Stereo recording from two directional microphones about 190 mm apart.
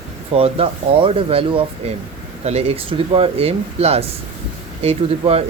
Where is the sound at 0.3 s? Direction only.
30° right (ahead or behind).